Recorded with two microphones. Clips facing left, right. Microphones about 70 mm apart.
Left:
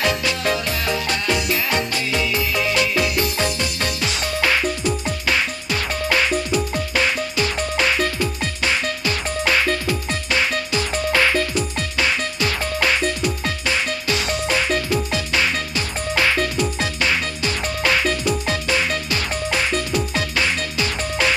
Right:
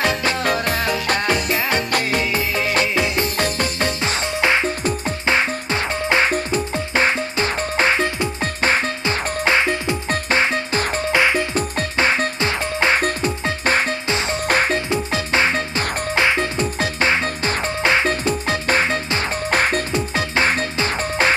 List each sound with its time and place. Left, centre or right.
0.3 s music: right
1.9 s music: right
2.9 s music: right
11.1 s music: right
11.5 s music: right
13.0 s music: right
14.1 s music: right
14.4 s music: right
14.8 s music: right
19.9 s music: right